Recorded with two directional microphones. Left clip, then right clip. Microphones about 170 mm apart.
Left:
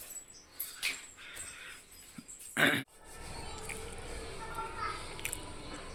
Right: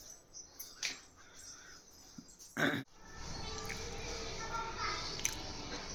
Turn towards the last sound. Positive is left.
turn(degrees=10)  # may be behind; listen again after turning